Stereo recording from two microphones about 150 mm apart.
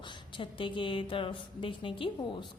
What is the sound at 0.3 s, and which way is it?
A woman's voice, 35° left (ahead or behind).